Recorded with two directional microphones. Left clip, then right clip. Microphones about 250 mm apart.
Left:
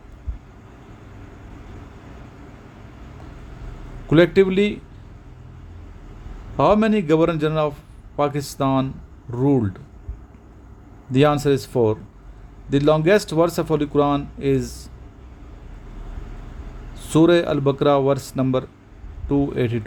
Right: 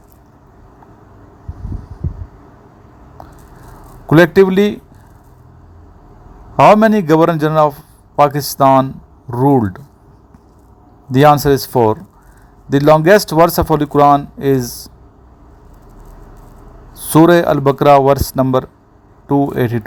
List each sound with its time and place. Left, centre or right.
4.1 s a man's voice: right
6.7 s a man's voice: right
11.1 s a man's voice: right
17.1 s a man's voice: right